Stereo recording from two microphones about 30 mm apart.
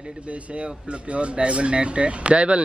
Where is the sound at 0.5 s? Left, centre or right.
Right.